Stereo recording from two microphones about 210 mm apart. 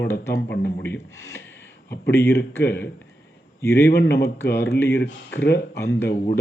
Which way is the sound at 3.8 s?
50° left (ahead or behind).